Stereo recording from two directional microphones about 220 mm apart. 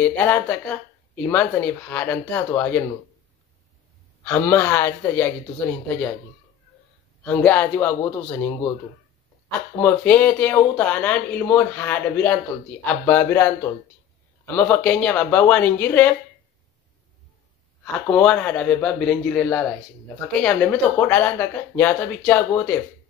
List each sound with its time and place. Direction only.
0.0 s speech: 10° left (ahead or behind)
4.2 s speech: 10° left (ahead or behind)
7.2 s speech: 10° left (ahead or behind)
9.8 s speech: 10° left (ahead or behind)
18.0 s speech: 5° left (ahead or behind)